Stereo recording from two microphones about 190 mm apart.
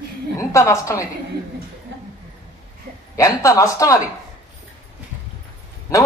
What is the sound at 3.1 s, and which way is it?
Speech, 15° left (ahead or behind).